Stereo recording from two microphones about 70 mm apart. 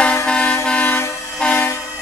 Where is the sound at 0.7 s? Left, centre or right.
Left.